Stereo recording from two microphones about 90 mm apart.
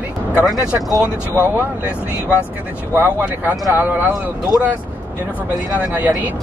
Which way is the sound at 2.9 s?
20° right (ahead or behind).